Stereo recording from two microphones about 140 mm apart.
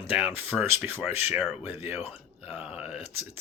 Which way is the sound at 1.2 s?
15° right (ahead or behind).